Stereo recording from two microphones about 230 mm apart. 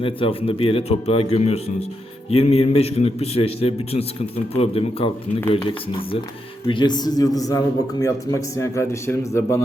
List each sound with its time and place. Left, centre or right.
0.0 s a man's voice: left